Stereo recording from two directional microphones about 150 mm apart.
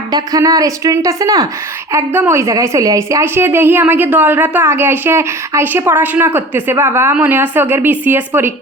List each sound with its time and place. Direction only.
0.1 s a woman's voice: 25° right (ahead or behind)